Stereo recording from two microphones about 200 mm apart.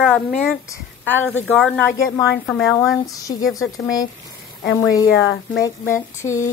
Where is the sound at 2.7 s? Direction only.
15° left (ahead or behind).